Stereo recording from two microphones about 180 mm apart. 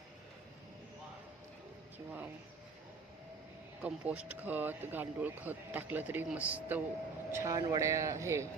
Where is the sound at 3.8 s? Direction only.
5° right (ahead or behind).